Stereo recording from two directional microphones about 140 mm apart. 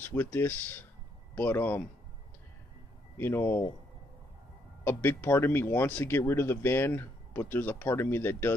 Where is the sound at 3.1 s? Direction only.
15° left (ahead or behind).